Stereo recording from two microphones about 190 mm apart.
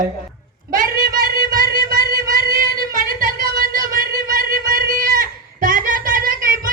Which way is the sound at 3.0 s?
50° right (ahead or behind).